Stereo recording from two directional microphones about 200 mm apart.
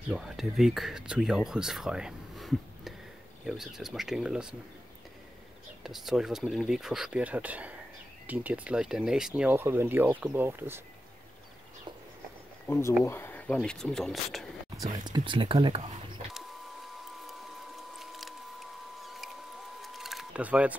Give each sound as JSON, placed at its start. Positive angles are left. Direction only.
{"t": 0.1, "sound": "speech", "side_deg": 0}
{"t": 5.9, "sound": "speech", "side_deg": 0}
{"t": 12.6, "sound": "speech", "side_deg": 10}
{"t": 14.8, "sound": "speech", "side_deg": -20}
{"t": 16.3, "sound": "printer", "side_deg": 0}
{"t": 17.9, "sound": "rodents", "side_deg": 0}
{"t": 19.8, "sound": "a sound", "side_deg": 0}